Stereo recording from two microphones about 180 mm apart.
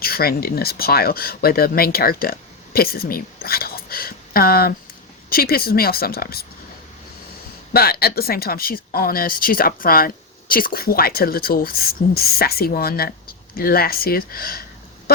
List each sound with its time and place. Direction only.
0.0 s speech: 55° left (ahead or behind)
7.7 s speech: 60° left (ahead or behind)